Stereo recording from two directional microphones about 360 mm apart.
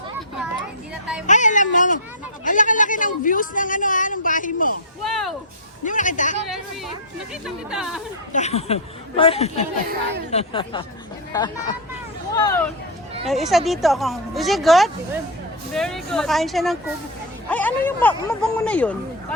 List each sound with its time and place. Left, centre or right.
1.3 s a woman's voice: left
5.0 s speech: centre
5.8 s a woman's voice: left
7.4 s speech: centre
8.3 s speech: centre
9.8 s speech: right
10.3 s speech: centre
13.2 s speech: centre